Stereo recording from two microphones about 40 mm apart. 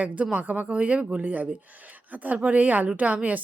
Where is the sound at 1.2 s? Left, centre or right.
Right.